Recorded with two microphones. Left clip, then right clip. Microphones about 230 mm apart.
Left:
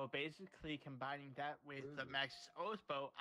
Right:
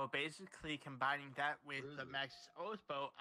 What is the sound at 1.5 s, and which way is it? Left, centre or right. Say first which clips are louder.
Speech: right 5 dB; right.